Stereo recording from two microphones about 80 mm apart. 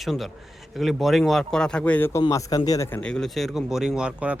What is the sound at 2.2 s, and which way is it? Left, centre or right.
Speech, left.